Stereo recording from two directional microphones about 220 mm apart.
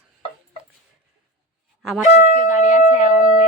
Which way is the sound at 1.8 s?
Centre (ahead or behind).